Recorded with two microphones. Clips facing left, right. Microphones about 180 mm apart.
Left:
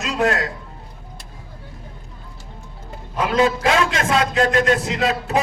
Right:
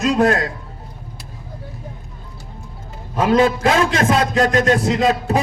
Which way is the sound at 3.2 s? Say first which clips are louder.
Right 3 dB; 45° right (ahead or behind).